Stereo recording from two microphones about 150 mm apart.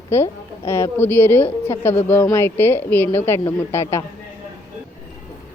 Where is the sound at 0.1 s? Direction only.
20° left (ahead or behind).